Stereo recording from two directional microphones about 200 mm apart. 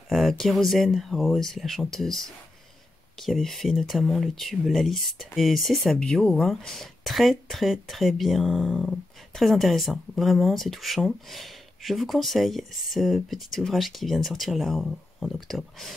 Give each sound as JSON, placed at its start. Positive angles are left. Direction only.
{"t": 0.1, "sound": "speech", "side_deg": 0}